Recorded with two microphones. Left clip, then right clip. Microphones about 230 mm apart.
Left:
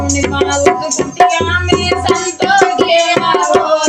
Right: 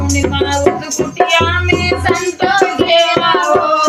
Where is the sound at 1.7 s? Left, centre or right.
Left.